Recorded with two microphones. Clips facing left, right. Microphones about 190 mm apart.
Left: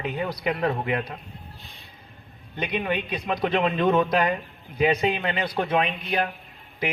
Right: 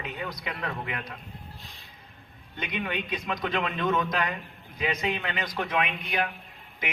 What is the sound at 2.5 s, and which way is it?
A man's voice, 30° left (ahead or behind).